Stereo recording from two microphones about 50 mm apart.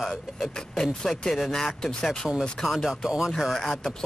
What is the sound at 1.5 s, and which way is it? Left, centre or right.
Speech, centre.